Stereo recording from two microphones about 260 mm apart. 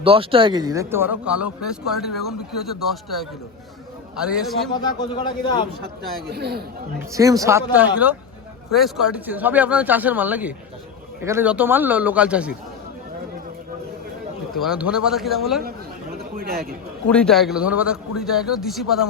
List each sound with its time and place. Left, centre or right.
0.0 s speech: right; by 4.7 s centre
4.7 s a man's voice: centre
6.3 s speech: right
7.1 s speech: centre
14.6 s speech: centre
16.3 s speech: right
17.1 s speech: centre